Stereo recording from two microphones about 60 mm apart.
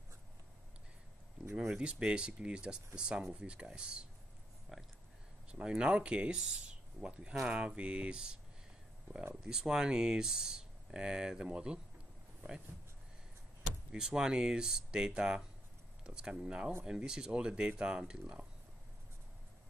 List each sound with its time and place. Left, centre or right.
1.5 s speech: centre
1.8 s speech: centre
4.7 s a sound: centre
5.5 s speech: centre
13.9 s speech: centre